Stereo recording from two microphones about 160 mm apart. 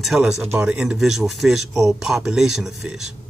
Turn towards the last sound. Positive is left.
turn(degrees=-5)  # may be behind; listen again after turning